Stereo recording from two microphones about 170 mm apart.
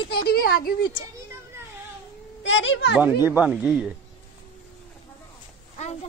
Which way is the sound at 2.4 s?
90° left.